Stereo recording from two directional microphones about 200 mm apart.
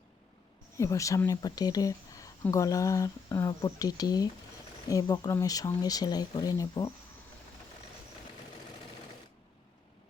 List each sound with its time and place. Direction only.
0.8 s speech: 15° left (ahead or behind)